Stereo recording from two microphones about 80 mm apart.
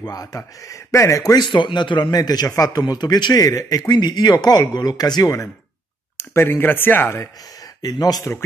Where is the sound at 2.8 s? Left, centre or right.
Left.